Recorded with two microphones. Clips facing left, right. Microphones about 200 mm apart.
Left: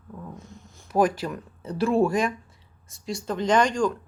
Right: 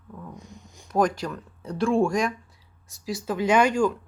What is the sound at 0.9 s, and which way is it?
Speech, 5° left (ahead or behind).